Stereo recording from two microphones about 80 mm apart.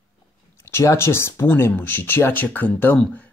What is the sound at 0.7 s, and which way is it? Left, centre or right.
Speech, left.